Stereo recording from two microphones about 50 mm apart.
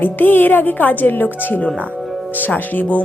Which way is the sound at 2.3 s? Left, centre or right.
Left.